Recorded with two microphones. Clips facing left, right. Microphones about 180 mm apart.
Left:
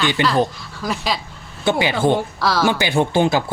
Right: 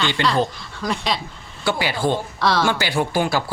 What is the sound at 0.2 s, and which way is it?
Speech, 20° left (ahead or behind).